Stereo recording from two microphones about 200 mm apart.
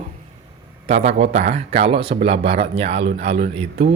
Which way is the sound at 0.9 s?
30° right (ahead or behind).